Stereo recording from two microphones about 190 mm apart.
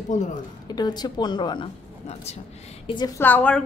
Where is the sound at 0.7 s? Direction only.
20° left (ahead or behind).